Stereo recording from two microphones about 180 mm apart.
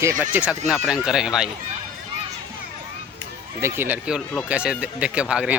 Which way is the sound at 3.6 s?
15° right (ahead or behind).